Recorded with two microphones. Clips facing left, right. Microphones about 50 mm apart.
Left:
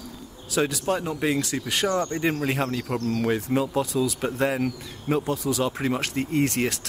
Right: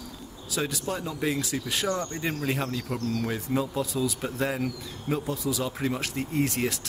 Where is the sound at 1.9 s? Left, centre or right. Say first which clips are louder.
Left 5 dB; left.